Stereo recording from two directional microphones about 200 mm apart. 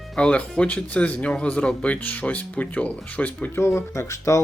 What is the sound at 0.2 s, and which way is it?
Speech, 5° left (ahead or behind).